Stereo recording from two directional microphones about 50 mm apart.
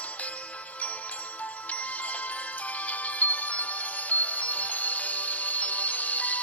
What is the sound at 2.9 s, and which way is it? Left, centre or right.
Music, left.